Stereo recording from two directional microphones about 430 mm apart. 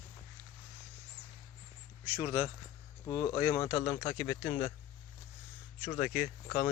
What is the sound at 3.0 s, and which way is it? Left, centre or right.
Speech, centre.